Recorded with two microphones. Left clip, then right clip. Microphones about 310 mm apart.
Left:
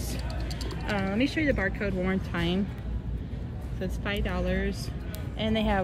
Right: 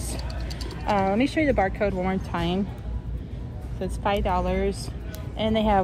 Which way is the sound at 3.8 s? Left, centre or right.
Centre.